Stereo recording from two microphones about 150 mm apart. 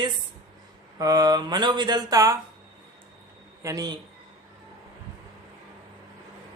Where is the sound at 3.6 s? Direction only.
25° right (ahead or behind).